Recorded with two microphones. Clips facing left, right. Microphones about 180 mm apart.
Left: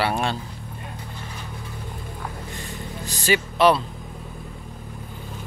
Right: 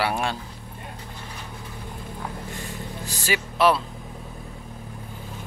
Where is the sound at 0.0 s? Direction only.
10° right (ahead or behind).